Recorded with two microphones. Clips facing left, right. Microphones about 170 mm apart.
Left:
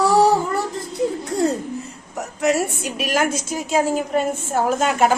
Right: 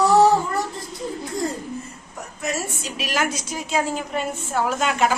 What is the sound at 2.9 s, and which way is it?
A woman's voice, 50° left (ahead or behind).